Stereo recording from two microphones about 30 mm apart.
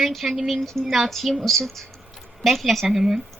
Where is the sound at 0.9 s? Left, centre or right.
Centre.